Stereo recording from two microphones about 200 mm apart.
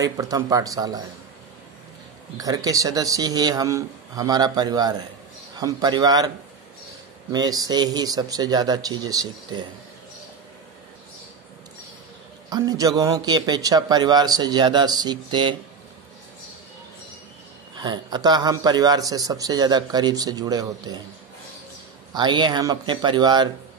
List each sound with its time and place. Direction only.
0.0 s speech: 15° right (ahead or behind)
2.3 s a man's voice: 15° right (ahead or behind)
7.3 s a man's voice: 20° right (ahead or behind)
12.4 s a man's voice: 20° right (ahead or behind)
17.7 s a man's voice: 20° right (ahead or behind)
22.1 s a man's voice: 20° right (ahead or behind)